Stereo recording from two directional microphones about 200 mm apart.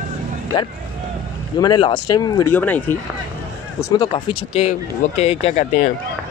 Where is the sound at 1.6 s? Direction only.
25° left (ahead or behind).